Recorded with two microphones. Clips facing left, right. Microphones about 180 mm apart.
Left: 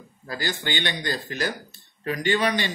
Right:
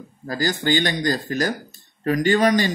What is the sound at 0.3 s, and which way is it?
Speech, 40° right (ahead or behind).